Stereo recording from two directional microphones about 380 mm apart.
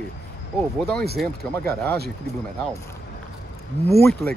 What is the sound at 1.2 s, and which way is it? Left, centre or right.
Speech, centre.